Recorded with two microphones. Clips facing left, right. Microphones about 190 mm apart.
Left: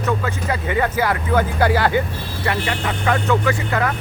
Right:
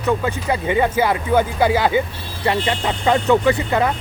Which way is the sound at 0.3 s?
20° right (ahead or behind).